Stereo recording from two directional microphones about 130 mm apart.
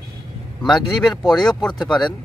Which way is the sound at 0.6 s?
35° left (ahead or behind).